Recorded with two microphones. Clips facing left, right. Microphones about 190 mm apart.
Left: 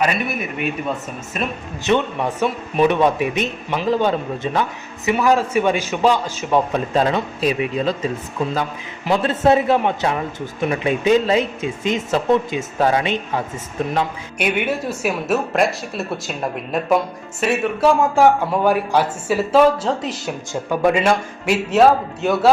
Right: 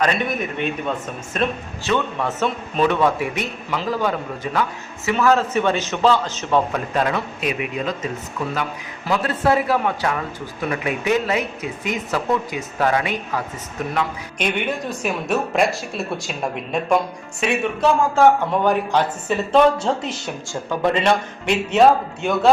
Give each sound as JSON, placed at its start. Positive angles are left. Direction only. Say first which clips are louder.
{"t": 0.0, "sound": "a man's voice", "louder": "even", "side_deg": 5}
{"t": 1.8, "sound": "a man's voice", "louder": "left 3 dB", "side_deg": 20}
{"t": 5.0, "sound": "a man's voice", "louder": "left 1 dB", "side_deg": 15}
{"t": 6.7, "sound": "a man's voice", "louder": "left 3 dB", "side_deg": 25}
{"t": 14.3, "sound": "a man's voice", "louder": "left 3 dB", "side_deg": 5}